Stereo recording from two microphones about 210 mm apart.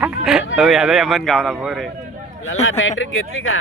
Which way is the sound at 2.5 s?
75° left (ahead or behind).